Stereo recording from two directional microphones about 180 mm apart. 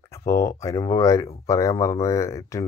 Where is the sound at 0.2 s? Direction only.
15° left (ahead or behind).